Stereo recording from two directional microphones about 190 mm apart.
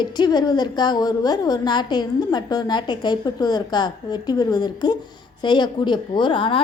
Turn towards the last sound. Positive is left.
turn(degrees=25)  # may be behind; listen again after turning